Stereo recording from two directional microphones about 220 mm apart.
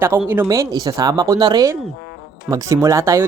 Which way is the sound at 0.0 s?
10° right (ahead or behind).